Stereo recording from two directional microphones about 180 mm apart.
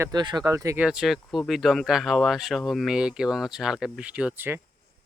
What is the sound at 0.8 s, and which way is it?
Speech, 5° right (ahead or behind).